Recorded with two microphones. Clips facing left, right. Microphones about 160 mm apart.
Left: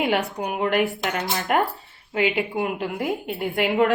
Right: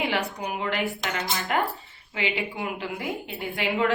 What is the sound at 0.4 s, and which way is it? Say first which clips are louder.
Speech: left 6 dB; 55° left (ahead or behind).